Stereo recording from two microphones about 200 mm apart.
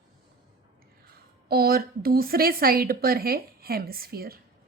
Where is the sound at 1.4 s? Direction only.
50° right (ahead or behind).